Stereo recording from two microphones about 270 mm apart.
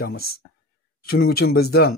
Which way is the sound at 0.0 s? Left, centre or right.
Left.